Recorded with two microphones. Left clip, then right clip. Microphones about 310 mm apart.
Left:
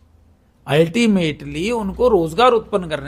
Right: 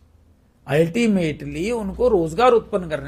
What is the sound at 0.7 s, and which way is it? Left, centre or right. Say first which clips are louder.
A man's voice: left 3 dB; left.